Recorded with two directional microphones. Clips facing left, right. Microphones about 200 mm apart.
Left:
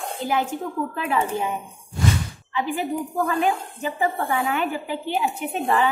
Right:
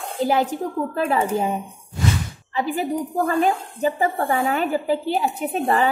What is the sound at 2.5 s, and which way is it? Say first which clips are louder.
A woman's voice: right 2 dB; 40° right (ahead or behind).